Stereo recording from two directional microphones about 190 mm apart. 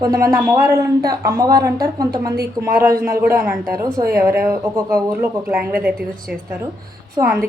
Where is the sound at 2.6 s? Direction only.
5° left (ahead or behind).